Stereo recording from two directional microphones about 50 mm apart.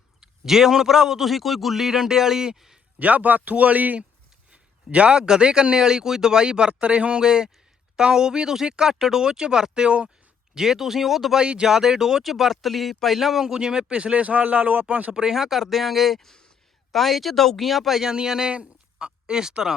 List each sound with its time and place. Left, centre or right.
0.2 s speech: centre
3.0 s a man's voice: right
7.2 s speech: centre
11.3 s speech: centre
15.1 s speech: centre